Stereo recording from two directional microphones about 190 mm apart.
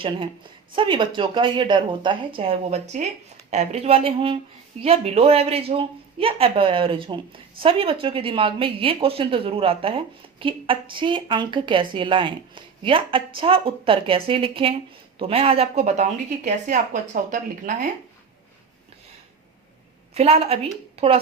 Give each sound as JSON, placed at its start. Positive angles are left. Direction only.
{"t": 0.8, "sound": "speech", "side_deg": -25}
{"t": 20.1, "sound": "speech", "side_deg": -35}